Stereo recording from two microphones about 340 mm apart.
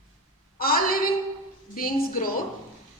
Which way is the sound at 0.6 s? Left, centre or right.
Left.